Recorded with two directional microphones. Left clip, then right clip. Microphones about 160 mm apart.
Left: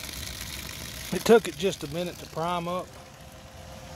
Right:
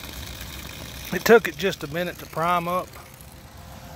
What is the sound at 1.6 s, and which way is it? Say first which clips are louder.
Speech: right 3 dB; 10° left (ahead or behind).